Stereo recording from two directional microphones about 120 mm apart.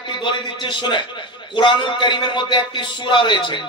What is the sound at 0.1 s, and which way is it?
A man's voice, 40° left (ahead or behind).